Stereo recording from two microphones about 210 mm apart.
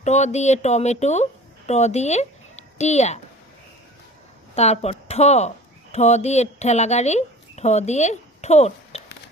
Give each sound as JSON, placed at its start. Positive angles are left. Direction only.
{"t": 0.0, "sound": "speech", "side_deg": 35}
{"t": 4.5, "sound": "speech", "side_deg": 30}